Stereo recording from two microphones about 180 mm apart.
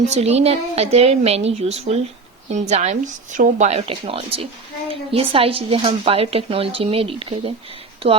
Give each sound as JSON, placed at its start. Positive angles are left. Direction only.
{"t": 0.1, "sound": "a woman's voice", "side_deg": -35}